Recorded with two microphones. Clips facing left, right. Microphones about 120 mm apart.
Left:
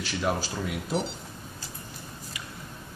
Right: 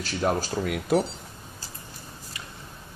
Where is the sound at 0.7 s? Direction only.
55° right (ahead or behind).